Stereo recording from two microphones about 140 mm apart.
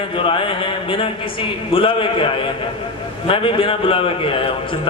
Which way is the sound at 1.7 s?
40° left (ahead or behind).